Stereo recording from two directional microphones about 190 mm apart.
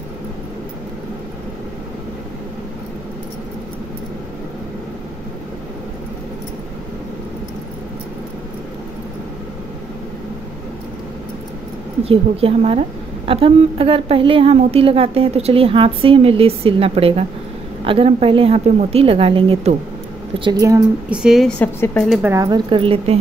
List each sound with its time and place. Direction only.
12.0 s a woman's voice: 30° right (ahead or behind)
21.1 s a woman's voice: 5° right (ahead or behind)
22.1 s a woman's voice: 10° right (ahead or behind); by 23.1 s 30° right (ahead or behind)